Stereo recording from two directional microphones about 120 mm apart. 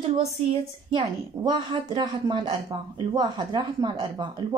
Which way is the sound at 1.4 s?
40° right (ahead or behind).